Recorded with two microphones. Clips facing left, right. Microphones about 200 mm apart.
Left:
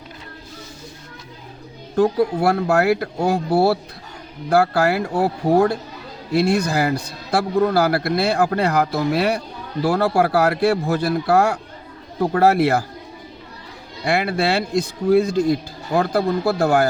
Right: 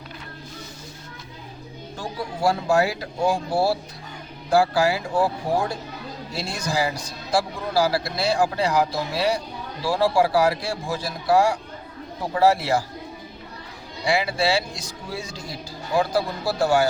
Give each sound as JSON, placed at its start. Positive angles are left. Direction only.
{"t": 2.0, "sound": "a man's voice", "side_deg": 60}
{"t": 14.0, "sound": "a man's voice", "side_deg": 60}